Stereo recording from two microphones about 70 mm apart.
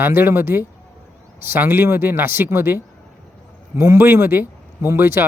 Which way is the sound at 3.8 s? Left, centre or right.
Right.